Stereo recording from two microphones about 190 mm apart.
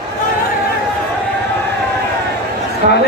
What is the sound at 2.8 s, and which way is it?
Speech, 40° right (ahead or behind).